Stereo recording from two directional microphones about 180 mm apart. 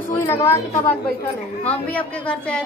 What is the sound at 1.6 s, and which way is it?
A woman's voice, 10° left (ahead or behind).